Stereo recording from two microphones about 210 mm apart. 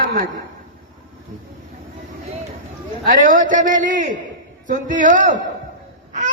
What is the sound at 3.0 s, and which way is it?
A man's voice, 40° right (ahead or behind).